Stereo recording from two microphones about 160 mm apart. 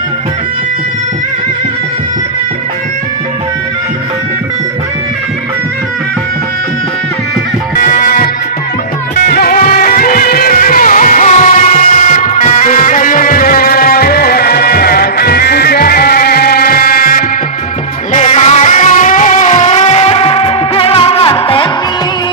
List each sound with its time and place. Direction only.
7.8 s music: 55° left (ahead or behind)
18.1 s music: 45° left (ahead or behind)